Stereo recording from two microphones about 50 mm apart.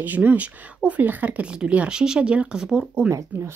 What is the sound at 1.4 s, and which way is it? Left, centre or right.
Speech, right.